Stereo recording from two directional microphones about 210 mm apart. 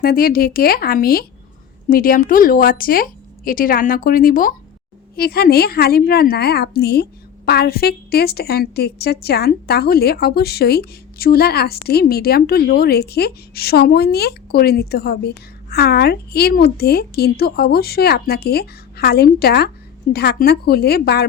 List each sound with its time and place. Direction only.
0.0 s a woman's voice: 45° left (ahead or behind)